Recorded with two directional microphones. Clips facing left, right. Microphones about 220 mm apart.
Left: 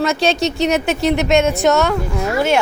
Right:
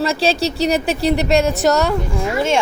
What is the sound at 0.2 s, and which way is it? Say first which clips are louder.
Speech: left 1 dB; 35° right (ahead or behind).